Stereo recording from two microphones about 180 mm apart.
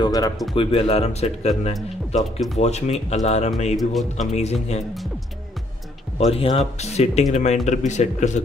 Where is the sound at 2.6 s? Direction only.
35° left (ahead or behind).